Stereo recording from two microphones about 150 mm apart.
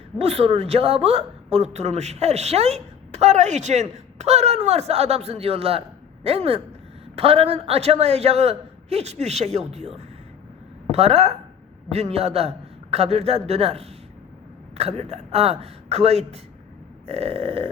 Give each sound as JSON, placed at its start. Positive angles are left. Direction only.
{"t": 0.2, "sound": "speech", "side_deg": -40}
{"t": 17.1, "sound": "burping", "side_deg": -45}